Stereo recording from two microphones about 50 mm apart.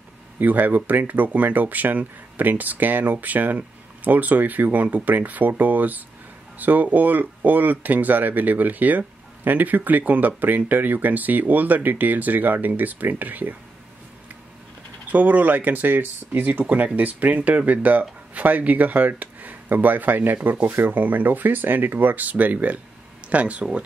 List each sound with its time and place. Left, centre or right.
0.4 s speech: right
15.0 s speech: right